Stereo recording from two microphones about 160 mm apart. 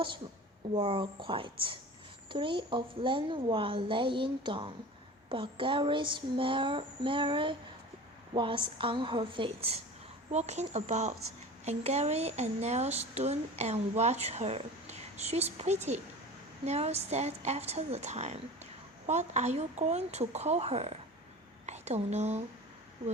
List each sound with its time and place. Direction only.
0.7 s a woman's voice: 30° right (ahead or behind)